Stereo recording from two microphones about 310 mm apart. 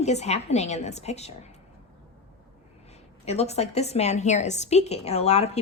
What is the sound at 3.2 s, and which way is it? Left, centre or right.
A woman's voice, left.